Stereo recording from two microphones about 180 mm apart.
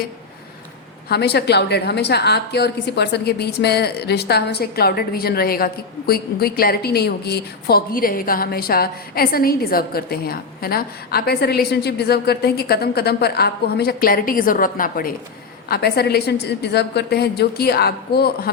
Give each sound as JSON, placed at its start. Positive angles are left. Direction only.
{"t": 1.0, "sound": "a woman's voice", "side_deg": 65}
{"t": 15.7, "sound": "a woman's voice", "side_deg": 65}